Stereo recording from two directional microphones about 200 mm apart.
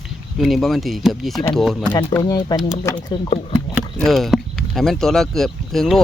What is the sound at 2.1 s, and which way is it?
Speech, 15° left (ahead or behind).